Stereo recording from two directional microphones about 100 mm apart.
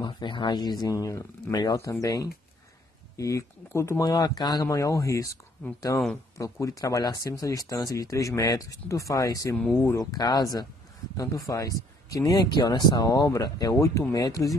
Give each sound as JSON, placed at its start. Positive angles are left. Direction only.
{"t": 0.0, "sound": "speech", "side_deg": 50}
{"t": 4.0, "sound": "speech", "side_deg": 45}
{"t": 4.6, "sound": "speech", "side_deg": 35}